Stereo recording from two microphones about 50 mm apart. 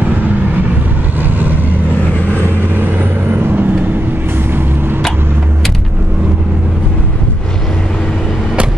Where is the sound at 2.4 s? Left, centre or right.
Right.